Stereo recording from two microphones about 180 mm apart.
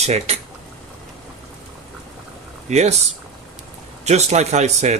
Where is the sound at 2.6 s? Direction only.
40° right (ahead or behind).